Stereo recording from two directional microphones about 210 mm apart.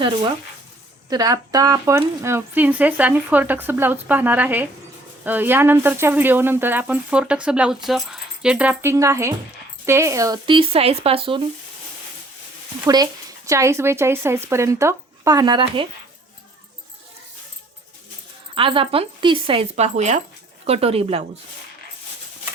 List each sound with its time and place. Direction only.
1.1 s speech: 15° right (ahead or behind)
12.8 s speech: 15° right (ahead or behind)
18.5 s speech: 25° right (ahead or behind)